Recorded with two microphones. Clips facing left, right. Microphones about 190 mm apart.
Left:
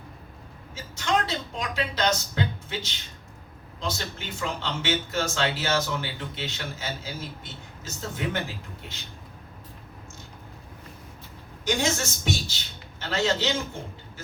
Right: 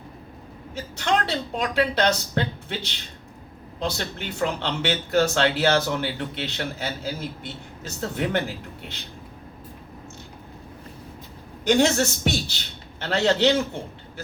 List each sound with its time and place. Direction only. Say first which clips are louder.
0.9 s speech: right 2 dB; 65° right (ahead or behind)
11.6 s speech: right 7 dB; 65° right (ahead or behind)